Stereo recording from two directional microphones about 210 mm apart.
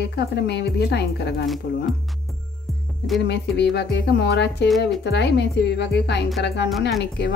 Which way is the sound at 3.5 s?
55° left (ahead or behind).